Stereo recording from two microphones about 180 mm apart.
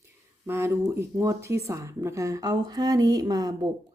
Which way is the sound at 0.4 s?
15° right (ahead or behind).